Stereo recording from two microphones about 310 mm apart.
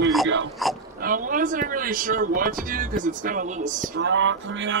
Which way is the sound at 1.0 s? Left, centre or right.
Right.